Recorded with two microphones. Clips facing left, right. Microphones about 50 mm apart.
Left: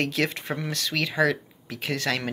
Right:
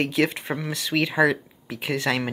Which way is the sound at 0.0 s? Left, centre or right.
Centre.